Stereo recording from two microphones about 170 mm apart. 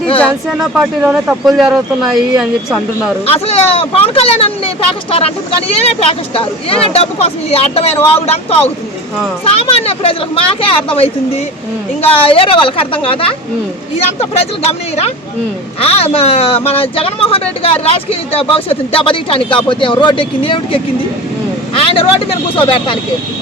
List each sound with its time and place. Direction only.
0.2 s speech: centre (ahead or behind)
3.2 s speech: 35° left (ahead or behind)
15.8 s speech: 35° left (ahead or behind)
21.8 s speech: 35° left (ahead or behind)